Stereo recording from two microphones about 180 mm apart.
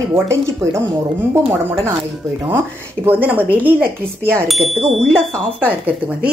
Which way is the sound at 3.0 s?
10° right (ahead or behind).